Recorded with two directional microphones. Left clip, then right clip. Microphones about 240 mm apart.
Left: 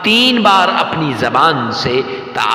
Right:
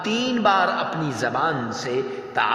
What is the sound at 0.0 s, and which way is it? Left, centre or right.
A man's voice, left.